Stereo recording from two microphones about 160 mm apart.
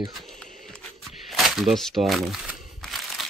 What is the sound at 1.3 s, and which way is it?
Crumpling, centre (ahead or behind).